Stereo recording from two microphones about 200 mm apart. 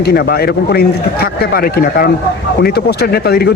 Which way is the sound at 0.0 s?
50° left (ahead or behind).